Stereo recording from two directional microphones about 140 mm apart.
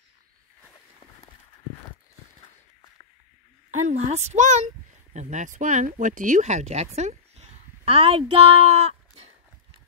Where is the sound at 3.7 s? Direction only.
55° right (ahead or behind).